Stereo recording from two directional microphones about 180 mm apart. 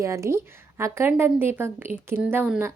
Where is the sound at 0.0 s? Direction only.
15° right (ahead or behind).